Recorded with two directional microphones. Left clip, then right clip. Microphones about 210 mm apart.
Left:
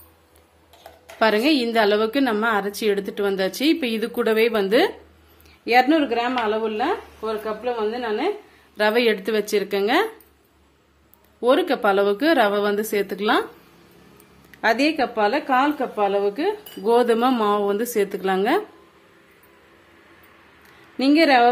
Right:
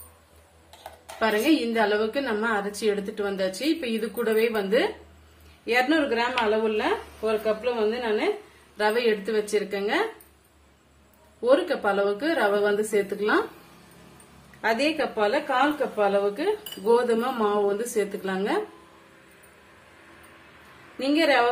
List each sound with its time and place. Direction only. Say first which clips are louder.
1.2 s a woman's voice: left 4 dB; 50° left (ahead or behind); by 8.4 s 25° left (ahead or behind)
8.7 s a woman's voice: left 4 dB; 45° left (ahead or behind)
11.4 s a woman's voice: left 3 dB; 45° left (ahead or behind)
14.6 s a woman's voice: left 4 dB; 45° left (ahead or behind)
21.0 s a woman's voice: left 5 dB; 45° left (ahead or behind)